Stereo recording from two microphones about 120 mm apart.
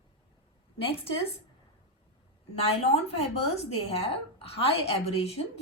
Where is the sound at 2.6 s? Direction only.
60° left (ahead or behind).